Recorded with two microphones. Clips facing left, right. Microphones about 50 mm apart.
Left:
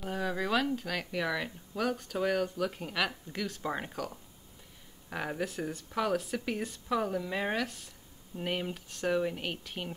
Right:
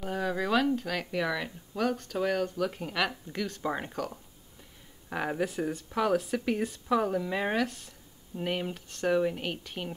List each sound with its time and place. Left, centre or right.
0.0 s speech: centre